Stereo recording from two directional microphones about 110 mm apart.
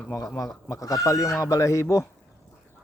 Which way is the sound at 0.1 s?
30° left (ahead or behind).